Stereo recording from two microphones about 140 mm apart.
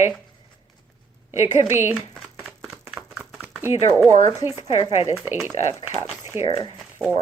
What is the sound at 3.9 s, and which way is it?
A woman's voice, 10° right (ahead or behind).